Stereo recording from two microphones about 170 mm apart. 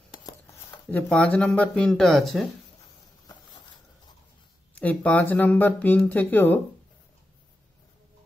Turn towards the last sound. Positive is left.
turn(degrees=10)  # may be behind; listen again after turning